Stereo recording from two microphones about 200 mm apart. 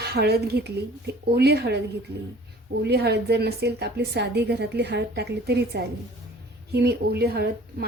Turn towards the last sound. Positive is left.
turn(degrees=-50)  # may be behind; listen again after turning